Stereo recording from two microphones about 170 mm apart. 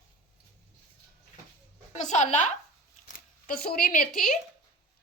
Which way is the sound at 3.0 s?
55° left (ahead or behind).